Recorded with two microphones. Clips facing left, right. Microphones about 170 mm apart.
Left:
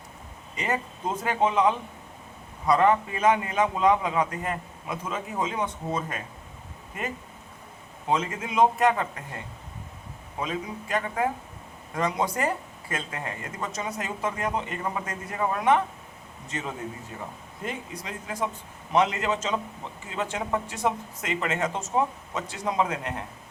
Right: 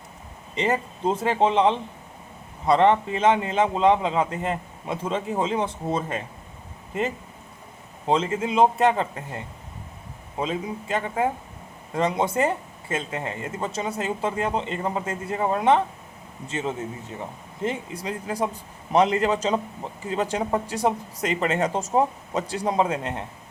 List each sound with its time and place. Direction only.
0.5 s a man's voice: 30° right (ahead or behind)